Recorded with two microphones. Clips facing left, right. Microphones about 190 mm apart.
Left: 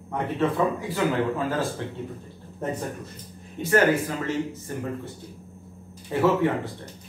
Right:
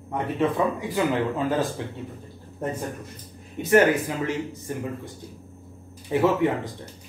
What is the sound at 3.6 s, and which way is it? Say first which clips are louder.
Speech: right 2 dB; 15° right (ahead or behind).